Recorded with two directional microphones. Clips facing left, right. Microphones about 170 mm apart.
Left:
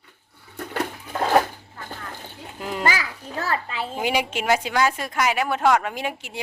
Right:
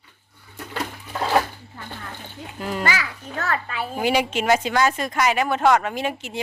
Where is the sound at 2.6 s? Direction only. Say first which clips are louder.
Even; 15° left (ahead or behind).